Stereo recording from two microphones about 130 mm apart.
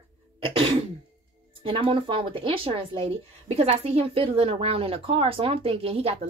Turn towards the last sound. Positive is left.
turn(degrees=-50)  # may be behind; listen again after turning